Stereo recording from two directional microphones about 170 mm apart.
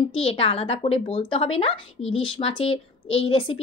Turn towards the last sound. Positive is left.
turn(degrees=30)  # may be behind; listen again after turning